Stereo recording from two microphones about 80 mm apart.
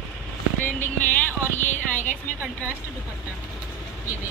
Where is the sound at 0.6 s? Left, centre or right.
Left.